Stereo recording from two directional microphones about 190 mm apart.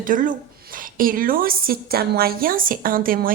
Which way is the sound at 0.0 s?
45° right (ahead or behind).